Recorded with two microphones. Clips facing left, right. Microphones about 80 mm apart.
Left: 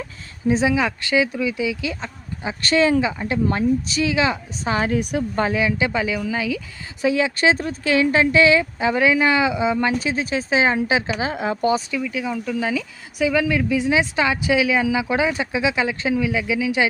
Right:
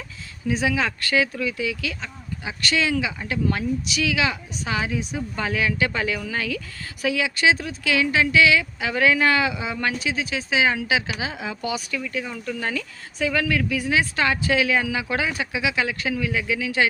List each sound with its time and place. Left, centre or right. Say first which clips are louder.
0.4 s speech: left 4 dB; left
4.9 s speech: left 6 dB; left
5.5 s speech: left 3 dB; left
7.0 s speech: left 3 dB; left
9.9 s speech: left 4 dB; left
11.3 s speech: left 8 dB; left
11.9 s speech: left 5 dB; centre